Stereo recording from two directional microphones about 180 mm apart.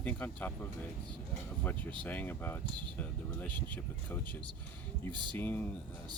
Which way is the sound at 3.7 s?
10° left (ahead or behind).